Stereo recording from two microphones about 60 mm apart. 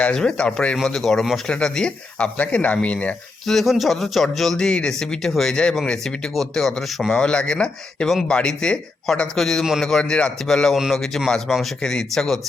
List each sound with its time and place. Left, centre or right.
0.0 s a man's voice: centre
3.4 s a man's voice: centre
10.4 s a man's voice: centre